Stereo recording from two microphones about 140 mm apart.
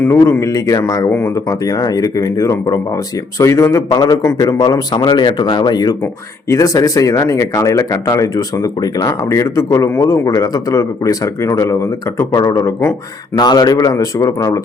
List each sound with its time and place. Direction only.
0.0 s speech: 20° left (ahead or behind)